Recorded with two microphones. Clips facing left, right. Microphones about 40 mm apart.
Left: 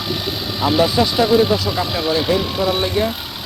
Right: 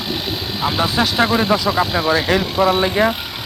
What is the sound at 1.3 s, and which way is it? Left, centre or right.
Speech, right.